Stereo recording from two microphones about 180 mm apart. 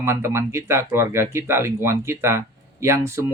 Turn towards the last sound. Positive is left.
turn(degrees=-15)  # may be behind; listen again after turning